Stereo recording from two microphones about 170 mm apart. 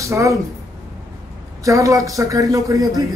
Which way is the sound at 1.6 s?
20° right (ahead or behind).